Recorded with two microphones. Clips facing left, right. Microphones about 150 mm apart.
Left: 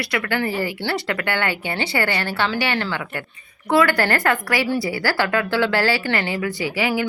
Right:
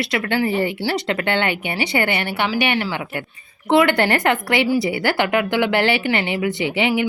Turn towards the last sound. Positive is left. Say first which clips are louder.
# right 3 dB
turn(degrees=-25)  # may be behind; listen again after turning